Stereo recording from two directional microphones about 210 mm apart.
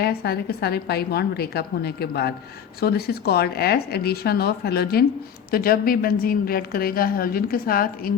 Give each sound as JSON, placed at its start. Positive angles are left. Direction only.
{"t": 0.0, "sound": "a woman's voice", "side_deg": 50}